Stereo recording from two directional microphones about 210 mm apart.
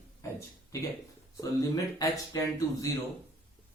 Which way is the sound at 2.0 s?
15° left (ahead or behind).